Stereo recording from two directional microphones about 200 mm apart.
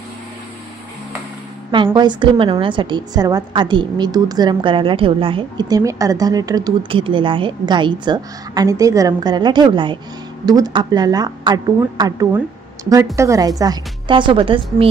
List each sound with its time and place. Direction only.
2.0 s a woman's voice: 25° right (ahead or behind)